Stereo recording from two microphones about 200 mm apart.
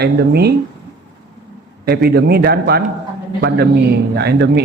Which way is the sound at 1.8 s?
50° right (ahead or behind).